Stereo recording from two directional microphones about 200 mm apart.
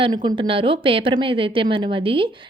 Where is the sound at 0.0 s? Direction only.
20° right (ahead or behind).